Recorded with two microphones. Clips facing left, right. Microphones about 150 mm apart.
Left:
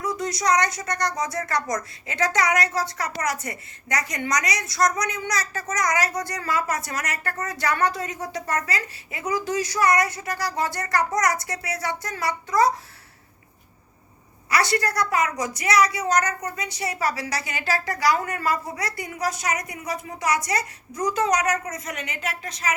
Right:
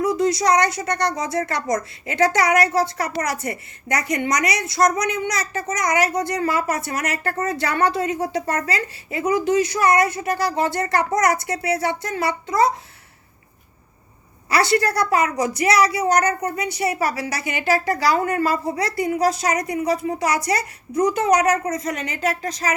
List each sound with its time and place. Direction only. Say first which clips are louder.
0.0 s a woman's voice: right 7 dB; 30° right (ahead or behind)
14.5 s a woman's voice: right 4 dB; 30° right (ahead or behind)